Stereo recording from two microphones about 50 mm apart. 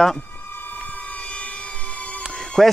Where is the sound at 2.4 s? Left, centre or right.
Centre.